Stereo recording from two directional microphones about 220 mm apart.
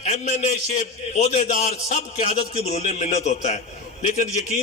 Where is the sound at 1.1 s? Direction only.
30° left (ahead or behind).